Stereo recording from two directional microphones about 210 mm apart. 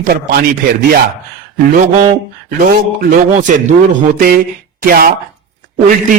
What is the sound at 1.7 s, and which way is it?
A man's voice, 40° right (ahead or behind).